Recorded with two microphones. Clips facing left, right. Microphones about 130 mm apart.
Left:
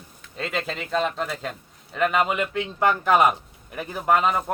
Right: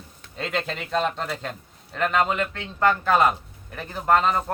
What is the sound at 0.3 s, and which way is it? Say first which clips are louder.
Speech: even; centre (ahead or behind).